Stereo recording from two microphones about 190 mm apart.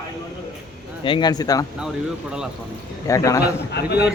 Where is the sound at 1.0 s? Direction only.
25° left (ahead or behind).